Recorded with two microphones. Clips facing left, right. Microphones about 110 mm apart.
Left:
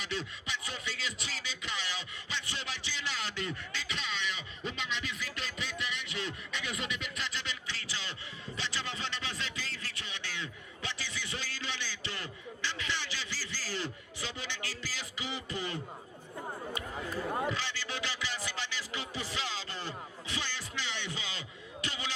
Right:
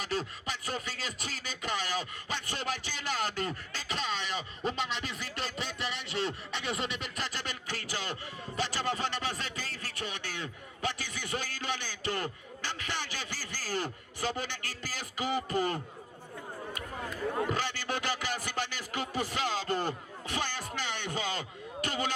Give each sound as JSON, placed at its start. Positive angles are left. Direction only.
{"t": 0.0, "sound": "beatboxing", "side_deg": -45}
{"t": 8.5, "sound": "a sound", "side_deg": -45}
{"t": 17.5, "sound": "music", "side_deg": -50}